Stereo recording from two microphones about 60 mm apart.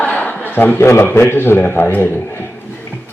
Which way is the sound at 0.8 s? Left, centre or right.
Left.